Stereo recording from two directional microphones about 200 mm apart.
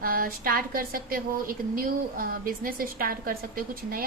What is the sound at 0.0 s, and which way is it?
A woman's voice, 45° right (ahead or behind).